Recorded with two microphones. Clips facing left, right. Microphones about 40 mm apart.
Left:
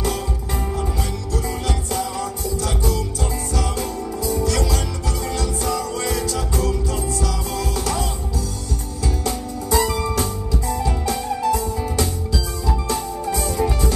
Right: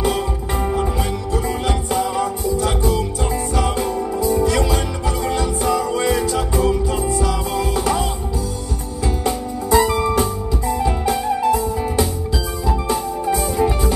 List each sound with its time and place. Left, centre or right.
1.3 s music: centre